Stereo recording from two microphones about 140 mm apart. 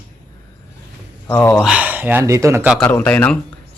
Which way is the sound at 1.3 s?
10° left (ahead or behind).